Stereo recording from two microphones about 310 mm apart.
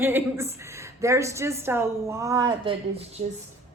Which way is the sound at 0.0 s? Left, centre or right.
Centre.